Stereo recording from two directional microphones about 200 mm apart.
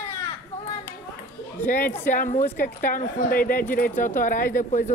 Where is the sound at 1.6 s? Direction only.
45° left (ahead or behind).